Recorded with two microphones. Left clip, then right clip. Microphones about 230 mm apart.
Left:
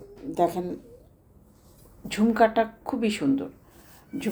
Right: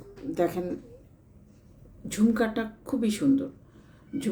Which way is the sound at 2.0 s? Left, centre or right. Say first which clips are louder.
Left 5 dB; centre.